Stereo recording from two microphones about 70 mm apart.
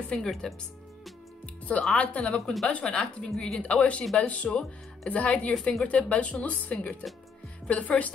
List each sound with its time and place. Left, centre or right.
0.1 s speech: centre
1.9 s speech: centre
5.5 s a woman's voice: centre